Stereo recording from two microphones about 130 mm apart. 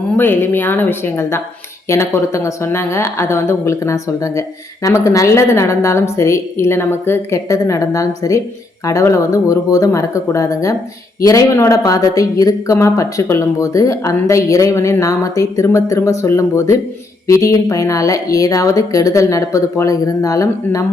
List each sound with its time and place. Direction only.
0.2 s a woman's voice: 15° left (ahead or behind)